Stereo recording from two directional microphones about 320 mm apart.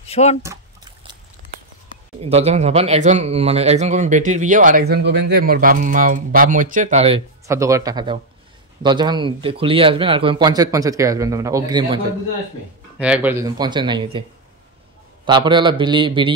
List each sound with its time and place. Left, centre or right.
0.0 s speech: centre
1.9 s speech: centre
13.0 s speech: centre
15.2 s speech: centre